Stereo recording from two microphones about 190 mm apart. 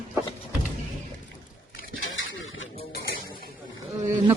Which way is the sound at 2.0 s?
90° left.